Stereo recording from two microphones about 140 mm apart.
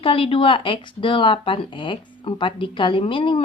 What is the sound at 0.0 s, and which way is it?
A woman's voice, 40° left (ahead or behind).